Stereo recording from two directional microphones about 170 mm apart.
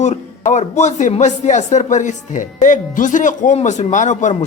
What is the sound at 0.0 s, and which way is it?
A man's voice, 45° left (ahead or behind).